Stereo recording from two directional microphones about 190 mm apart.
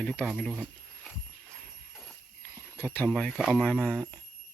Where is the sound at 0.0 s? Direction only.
5° left (ahead or behind).